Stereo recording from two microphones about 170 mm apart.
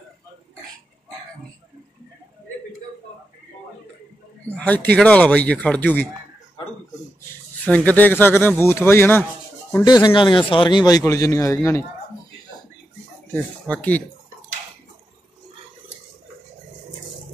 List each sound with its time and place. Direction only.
4.5 s speech: 10° left (ahead or behind)
7.7 s speech: 10° left (ahead or behind)
9.8 s a man's voice: 25° left (ahead or behind)
13.3 s speech: 10° left (ahead or behind)